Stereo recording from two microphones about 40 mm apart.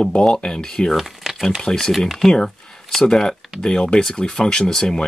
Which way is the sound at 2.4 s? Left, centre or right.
Centre.